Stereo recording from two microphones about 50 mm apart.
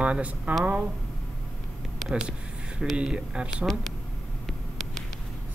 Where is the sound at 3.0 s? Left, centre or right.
Centre.